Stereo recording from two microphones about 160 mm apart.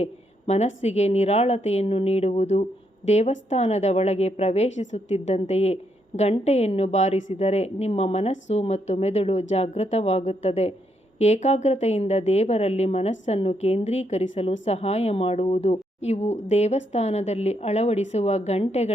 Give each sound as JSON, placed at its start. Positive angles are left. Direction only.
{"t": 0.0, "sound": "a woman's voice", "side_deg": 45}